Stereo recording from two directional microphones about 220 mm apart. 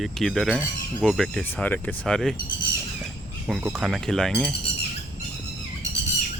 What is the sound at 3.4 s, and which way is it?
Speech, centre (ahead or behind).